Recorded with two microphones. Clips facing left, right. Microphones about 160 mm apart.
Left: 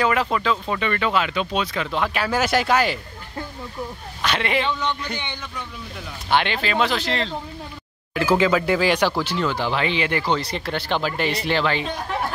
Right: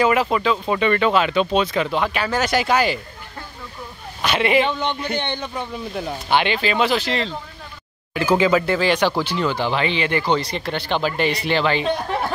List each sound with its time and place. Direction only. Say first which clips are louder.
0.0 s speech: right 3 dB; 10° right (ahead or behind)
0.7 s speech: right 5 dB; 20° right (ahead or behind)
1.9 s speech: right 1 dB; centre (ahead or behind)
4.2 s speech: right 5 dB; 10° right (ahead or behind)
5.1 s speech: right 7 dB; 65° right (ahead or behind)
6.3 s speech: right 2 dB; 5° right (ahead or behind)